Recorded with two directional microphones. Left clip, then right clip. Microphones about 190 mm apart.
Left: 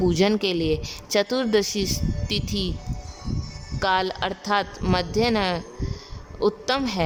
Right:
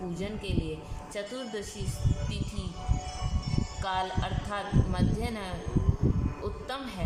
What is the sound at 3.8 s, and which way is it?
A woman's voice, 50° left (ahead or behind).